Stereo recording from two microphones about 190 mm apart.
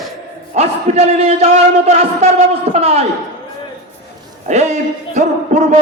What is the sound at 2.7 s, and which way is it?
Speech, 35° right (ahead or behind).